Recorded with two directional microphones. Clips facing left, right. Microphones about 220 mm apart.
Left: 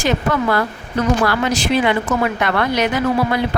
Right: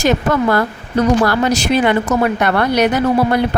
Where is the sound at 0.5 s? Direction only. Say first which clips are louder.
Right 3 dB; 40° right (ahead or behind).